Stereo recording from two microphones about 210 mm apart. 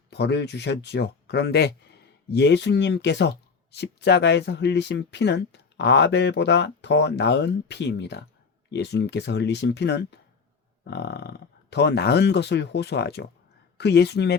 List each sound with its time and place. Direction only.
0.1 s speech: 50° left (ahead or behind)